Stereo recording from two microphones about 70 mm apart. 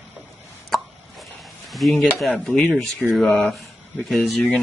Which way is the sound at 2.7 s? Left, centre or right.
Centre.